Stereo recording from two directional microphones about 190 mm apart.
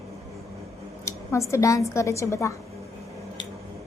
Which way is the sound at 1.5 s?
15° left (ahead or behind).